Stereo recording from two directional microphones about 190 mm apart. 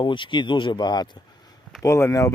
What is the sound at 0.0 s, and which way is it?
Speech, 25° left (ahead or behind).